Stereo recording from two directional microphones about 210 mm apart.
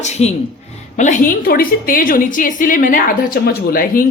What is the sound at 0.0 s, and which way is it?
A woman's voice, 30° left (ahead or behind).